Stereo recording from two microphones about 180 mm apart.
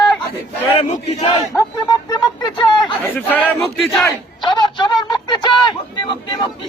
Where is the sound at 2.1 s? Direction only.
25° left (ahead or behind).